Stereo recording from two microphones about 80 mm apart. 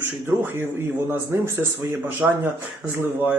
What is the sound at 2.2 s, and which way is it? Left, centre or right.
Speech, centre.